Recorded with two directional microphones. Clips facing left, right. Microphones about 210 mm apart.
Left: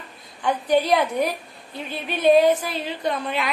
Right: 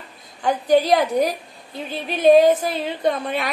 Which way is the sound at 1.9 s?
45° right (ahead or behind).